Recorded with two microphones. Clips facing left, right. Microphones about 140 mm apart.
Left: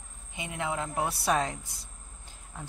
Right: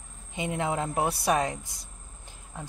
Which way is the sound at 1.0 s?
15° right (ahead or behind).